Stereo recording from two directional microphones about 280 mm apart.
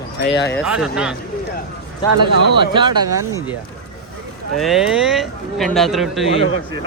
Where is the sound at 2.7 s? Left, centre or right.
Centre.